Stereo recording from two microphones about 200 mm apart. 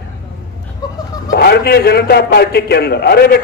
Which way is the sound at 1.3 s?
50° left (ahead or behind).